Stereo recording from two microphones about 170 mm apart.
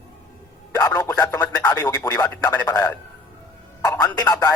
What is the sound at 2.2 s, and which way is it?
Speech, 10° left (ahead or behind).